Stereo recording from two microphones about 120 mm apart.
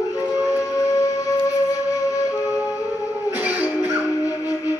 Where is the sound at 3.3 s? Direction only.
15° right (ahead or behind).